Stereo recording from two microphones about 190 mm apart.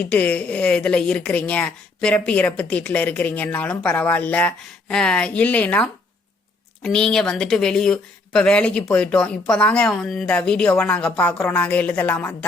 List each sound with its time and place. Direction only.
0.0 s a woman's voice: 5° left (ahead or behind)